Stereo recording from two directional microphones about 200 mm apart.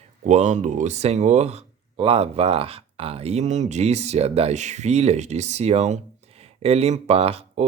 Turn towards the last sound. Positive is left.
turn(degrees=-30)  # may be behind; listen again after turning